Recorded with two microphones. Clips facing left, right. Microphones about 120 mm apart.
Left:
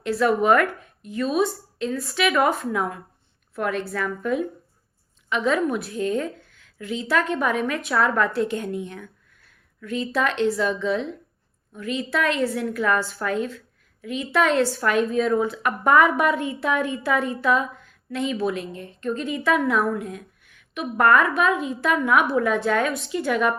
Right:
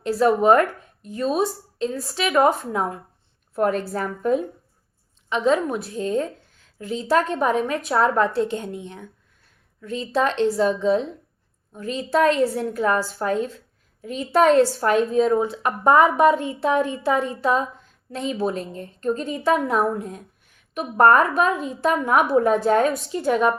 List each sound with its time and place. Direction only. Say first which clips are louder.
0.0 s a woman's voice: right 2 dB; 35° right (ahead or behind)